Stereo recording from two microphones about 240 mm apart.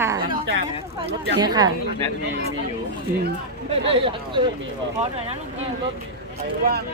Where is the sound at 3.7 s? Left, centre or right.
Right.